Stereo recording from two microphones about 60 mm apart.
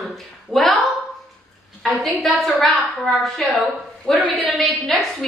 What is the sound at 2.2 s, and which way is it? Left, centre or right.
A woman's voice, centre.